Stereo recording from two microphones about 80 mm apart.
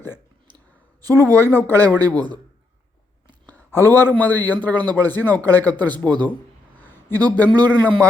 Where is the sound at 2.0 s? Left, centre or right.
Right.